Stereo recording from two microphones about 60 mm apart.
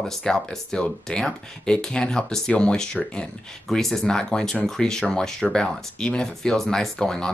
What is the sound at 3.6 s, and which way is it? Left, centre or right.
Speech, centre.